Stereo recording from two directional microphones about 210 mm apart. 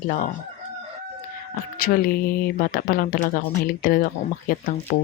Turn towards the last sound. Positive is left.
turn(degrees=40)  # may be behind; listen again after turning